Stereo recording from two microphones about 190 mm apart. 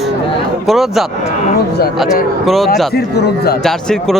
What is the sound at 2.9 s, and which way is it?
Speech, 55° left (ahead or behind).